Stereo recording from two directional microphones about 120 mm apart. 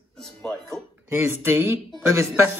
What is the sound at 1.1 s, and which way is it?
Speech, 15° right (ahead or behind).